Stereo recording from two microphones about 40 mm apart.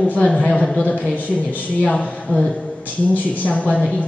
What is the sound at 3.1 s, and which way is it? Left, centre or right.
Speech, left.